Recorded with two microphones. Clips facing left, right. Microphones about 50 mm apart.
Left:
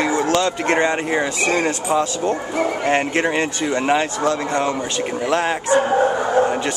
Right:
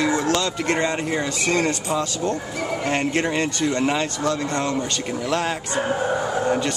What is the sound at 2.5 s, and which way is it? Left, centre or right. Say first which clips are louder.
Speech: left 5 dB; left.